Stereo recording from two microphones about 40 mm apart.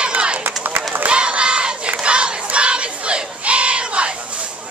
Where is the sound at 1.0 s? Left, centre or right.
Right.